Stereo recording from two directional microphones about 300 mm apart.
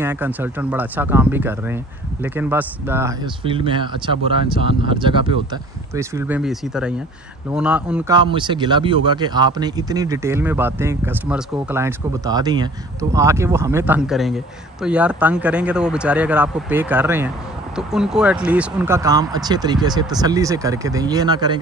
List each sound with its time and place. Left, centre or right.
0.0 s a man's voice: centre
8.3 s a man's voice: centre